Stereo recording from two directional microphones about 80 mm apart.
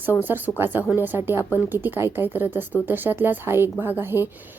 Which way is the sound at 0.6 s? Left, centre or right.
Right.